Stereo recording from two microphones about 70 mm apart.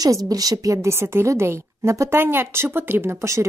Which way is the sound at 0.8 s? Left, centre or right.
Right.